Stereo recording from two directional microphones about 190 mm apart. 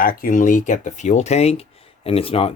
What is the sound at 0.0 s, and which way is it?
Speech, 50° left (ahead or behind).